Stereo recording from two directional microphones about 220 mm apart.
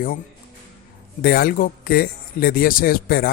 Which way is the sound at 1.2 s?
45° left (ahead or behind).